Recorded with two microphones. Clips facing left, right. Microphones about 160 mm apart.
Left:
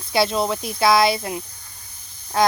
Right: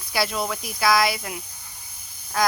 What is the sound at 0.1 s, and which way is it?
Speech, 25° left (ahead or behind).